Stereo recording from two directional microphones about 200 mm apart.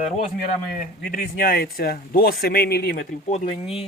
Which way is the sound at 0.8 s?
45° left (ahead or behind).